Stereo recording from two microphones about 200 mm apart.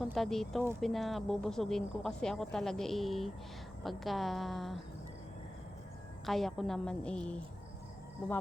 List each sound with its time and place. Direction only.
0.0 s speech: centre (ahead or behind)
6.2 s speech: centre (ahead or behind)